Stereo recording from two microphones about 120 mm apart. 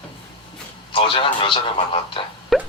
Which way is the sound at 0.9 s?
45° left (ahead or behind).